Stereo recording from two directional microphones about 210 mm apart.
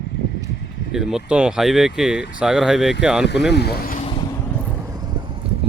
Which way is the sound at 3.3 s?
55° left (ahead or behind).